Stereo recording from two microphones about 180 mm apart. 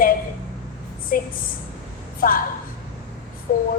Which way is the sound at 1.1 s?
50° left (ahead or behind).